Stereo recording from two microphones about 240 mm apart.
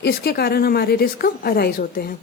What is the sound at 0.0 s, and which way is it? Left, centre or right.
Speech, left.